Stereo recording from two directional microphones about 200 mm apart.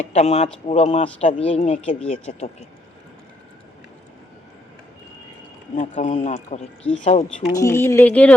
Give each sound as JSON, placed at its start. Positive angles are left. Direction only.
{"t": 0.1, "sound": "speech", "side_deg": 35}
{"t": 5.7, "sound": "speech", "side_deg": 35}
{"t": 7.5, "sound": "speech", "side_deg": 15}